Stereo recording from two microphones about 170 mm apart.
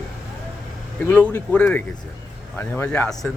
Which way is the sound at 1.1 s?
10° left (ahead or behind).